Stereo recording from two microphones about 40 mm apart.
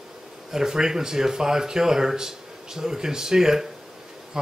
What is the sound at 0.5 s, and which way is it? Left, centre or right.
Speech, centre.